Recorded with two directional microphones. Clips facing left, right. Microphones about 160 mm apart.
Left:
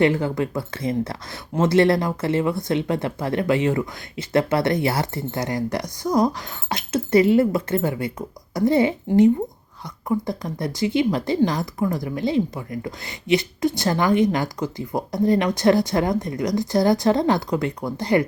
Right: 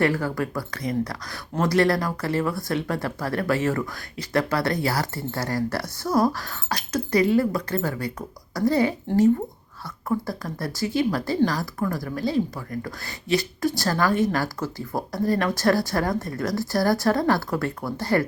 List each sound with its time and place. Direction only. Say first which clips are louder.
0.0 s speech: left 4 dB; 20° left (ahead or behind)
10.1 s speech: left 3 dB; 20° left (ahead or behind)